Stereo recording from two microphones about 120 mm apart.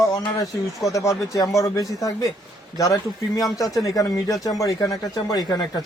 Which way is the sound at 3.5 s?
30° left (ahead or behind).